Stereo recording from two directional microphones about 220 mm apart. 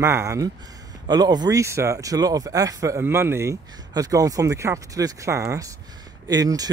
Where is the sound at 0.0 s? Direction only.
10° right (ahead or behind).